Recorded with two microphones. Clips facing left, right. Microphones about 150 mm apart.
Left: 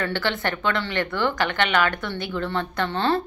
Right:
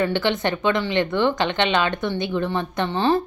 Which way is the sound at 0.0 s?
20° right (ahead or behind).